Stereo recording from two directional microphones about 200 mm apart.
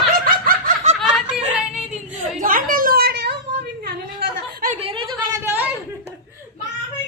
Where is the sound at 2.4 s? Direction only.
45° right (ahead or behind).